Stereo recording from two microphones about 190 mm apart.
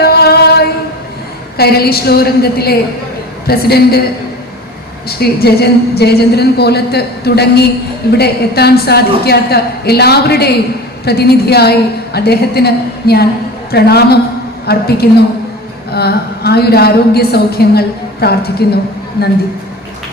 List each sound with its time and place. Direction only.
0.0 s a sound: 55° left (ahead or behind)
1.5 s a woman's voice: 55° left (ahead or behind)
5.0 s a woman's voice: 55° left (ahead or behind)